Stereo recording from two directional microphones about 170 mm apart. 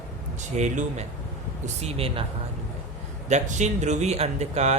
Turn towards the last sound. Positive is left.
turn(degrees=-40)  # may be behind; listen again after turning